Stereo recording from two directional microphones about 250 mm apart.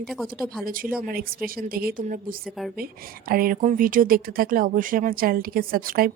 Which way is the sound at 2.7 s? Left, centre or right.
Right.